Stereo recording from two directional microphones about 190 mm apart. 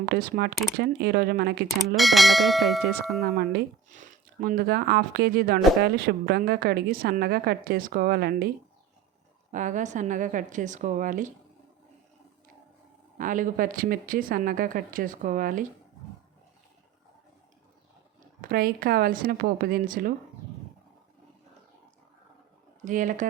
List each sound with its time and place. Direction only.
0.0 s speech: 50° right (ahead or behind)
2.0 s speech: centre (ahead or behind)
3.3 s speech: 55° right (ahead or behind)
3.8 s speech: 40° right (ahead or behind)
9.5 s speech: 40° right (ahead or behind)
13.1 s speech: 45° right (ahead or behind)
18.4 s speech: 50° right (ahead or behind)
22.8 s speech: 40° right (ahead or behind)